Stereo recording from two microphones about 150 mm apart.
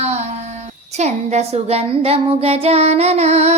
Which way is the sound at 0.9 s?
50° right (ahead or behind).